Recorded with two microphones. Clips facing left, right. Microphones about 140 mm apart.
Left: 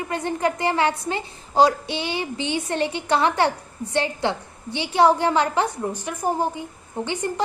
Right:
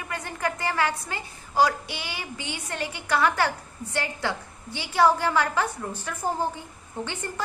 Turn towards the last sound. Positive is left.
turn(degrees=15)  # may be behind; listen again after turning